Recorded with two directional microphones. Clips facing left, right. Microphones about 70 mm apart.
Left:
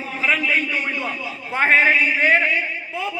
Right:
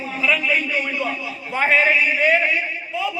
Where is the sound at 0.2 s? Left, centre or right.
Left.